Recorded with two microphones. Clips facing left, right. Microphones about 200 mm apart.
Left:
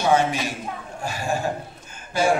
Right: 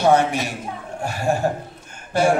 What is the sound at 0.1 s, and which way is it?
Speech, 70° right (ahead or behind).